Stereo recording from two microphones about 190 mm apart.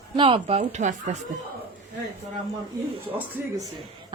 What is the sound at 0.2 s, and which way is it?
Speech, 30° right (ahead or behind).